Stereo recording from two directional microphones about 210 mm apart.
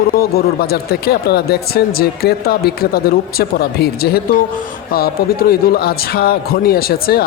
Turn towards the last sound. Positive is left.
turn(degrees=45)  # may be behind; listen again after turning